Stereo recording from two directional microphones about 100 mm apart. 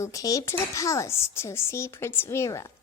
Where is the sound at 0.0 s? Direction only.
35° left (ahead or behind).